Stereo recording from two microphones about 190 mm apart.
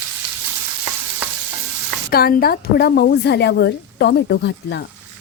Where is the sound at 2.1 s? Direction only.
50° left (ahead or behind).